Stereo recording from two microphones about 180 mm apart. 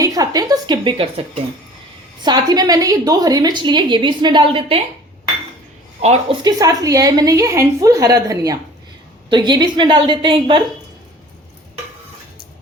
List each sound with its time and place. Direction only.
0.0 s a woman's voice: 20° right (ahead or behind)
2.2 s a woman's voice: 25° right (ahead or behind)
6.0 s speech: 35° right (ahead or behind)
6.4 s a woman's voice: 20° right (ahead or behind)